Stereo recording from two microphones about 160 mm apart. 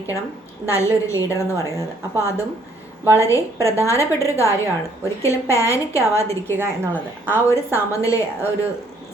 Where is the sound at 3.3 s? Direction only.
20° left (ahead or behind).